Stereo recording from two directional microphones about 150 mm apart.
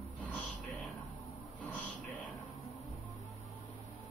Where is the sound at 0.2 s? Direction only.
10° left (ahead or behind).